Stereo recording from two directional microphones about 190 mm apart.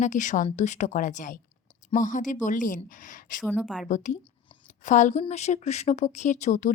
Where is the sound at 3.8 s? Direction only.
40° left (ahead or behind).